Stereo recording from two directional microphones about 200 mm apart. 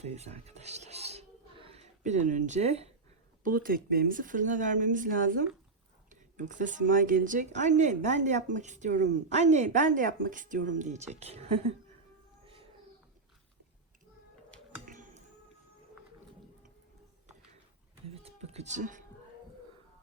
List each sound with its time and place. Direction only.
0.0 s music: 35° right (ahead or behind)
3.4 s speech: 45° right (ahead or behind)
14.8 s a sound: 40° right (ahead or behind)
18.1 s music: 30° right (ahead or behind)